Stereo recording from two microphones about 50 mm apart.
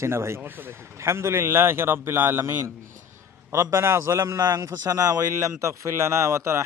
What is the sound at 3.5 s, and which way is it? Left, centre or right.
A man's voice, right.